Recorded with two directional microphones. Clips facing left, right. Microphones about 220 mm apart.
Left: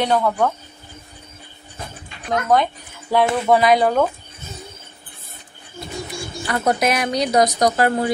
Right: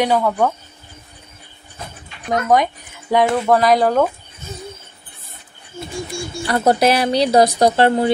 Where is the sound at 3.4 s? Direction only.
5° left (ahead or behind).